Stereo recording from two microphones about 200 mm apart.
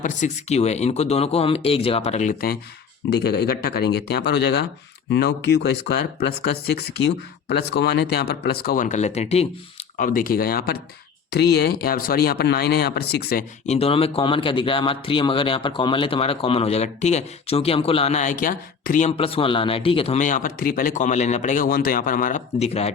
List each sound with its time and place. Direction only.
0.0 s a man's voice: 35° left (ahead or behind); by 6.0 s 55° left (ahead or behind)
7.4 s speech: 55° left (ahead or behind); by 9.5 s 30° left (ahead or behind)
10.0 s speech: 45° left (ahead or behind)
13.7 s a man's voice: 30° left (ahead or behind)
19.1 s a man's voice: 25° left (ahead or behind)